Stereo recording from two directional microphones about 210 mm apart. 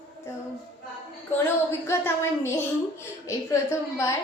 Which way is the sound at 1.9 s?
10° left (ahead or behind).